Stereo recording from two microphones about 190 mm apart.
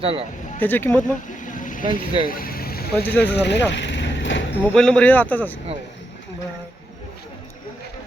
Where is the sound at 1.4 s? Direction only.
45° left (ahead or behind).